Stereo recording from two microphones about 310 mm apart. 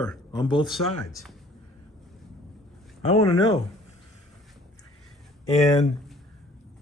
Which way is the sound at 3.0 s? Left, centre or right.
Centre.